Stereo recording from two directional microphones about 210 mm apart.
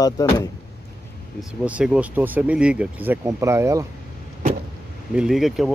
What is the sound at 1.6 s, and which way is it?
Speech, 5° right (ahead or behind).